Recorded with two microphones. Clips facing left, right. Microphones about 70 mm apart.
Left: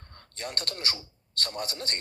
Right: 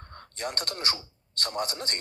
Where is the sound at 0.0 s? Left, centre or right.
Right.